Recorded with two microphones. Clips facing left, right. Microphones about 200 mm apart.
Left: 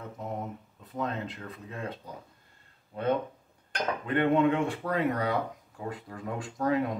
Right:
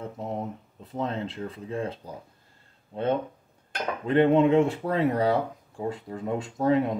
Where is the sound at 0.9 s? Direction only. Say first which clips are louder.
Right 3 dB; 30° right (ahead or behind).